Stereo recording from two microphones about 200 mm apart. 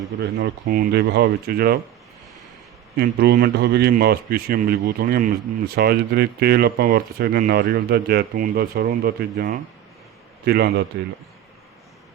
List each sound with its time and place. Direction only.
0.2 s speech: 55° right (ahead or behind)
3.0 s speech: 55° right (ahead or behind)